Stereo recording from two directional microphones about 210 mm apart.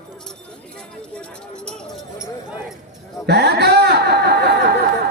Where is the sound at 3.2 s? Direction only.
50° right (ahead or behind).